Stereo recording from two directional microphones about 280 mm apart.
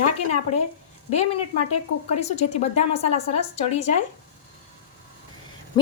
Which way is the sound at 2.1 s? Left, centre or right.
Left.